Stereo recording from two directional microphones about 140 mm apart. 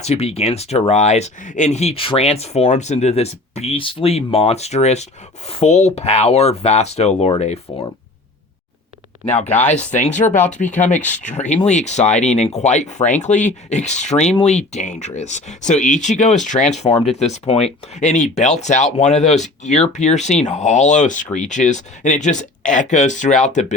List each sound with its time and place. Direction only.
0.0 s speech: 50° left (ahead or behind)
9.5 s speech: 10° left (ahead or behind)
9.7 s speech: 60° left (ahead or behind)